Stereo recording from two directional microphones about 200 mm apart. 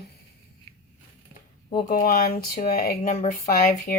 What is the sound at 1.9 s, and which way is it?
Speech, 45° left (ahead or behind).